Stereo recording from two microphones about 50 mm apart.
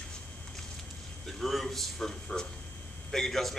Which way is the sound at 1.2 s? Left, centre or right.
Centre.